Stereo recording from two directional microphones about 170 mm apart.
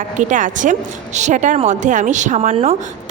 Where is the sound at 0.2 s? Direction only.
50° right (ahead or behind).